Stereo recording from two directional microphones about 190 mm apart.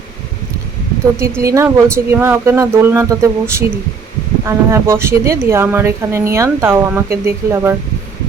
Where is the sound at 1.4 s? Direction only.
15° right (ahead or behind).